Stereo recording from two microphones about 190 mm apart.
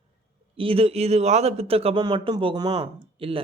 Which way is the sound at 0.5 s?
30° right (ahead or behind).